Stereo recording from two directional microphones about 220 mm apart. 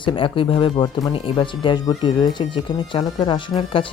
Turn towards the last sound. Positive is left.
turn(degrees=20)  # may be behind; listen again after turning